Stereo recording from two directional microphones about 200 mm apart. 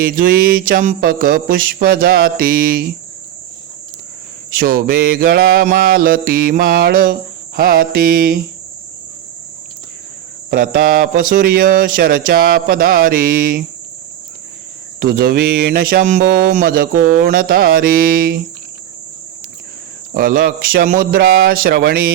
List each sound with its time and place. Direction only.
0.0 s mantra: 45° right (ahead or behind)
4.5 s mantra: 45° right (ahead or behind)
10.5 s mantra: 45° right (ahead or behind)
15.0 s mantra: 50° right (ahead or behind)
20.1 s mantra: 45° right (ahead or behind)